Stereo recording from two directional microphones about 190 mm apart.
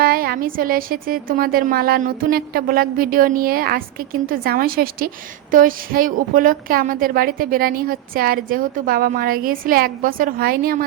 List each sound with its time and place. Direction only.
0.0 s a woman's voice: 50° right (ahead or behind)